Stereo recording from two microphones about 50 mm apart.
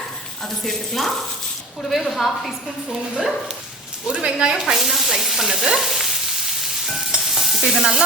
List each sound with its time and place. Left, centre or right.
0.6 s a woman's voice: centre
4.0 s speech: centre
4.6 s stir: centre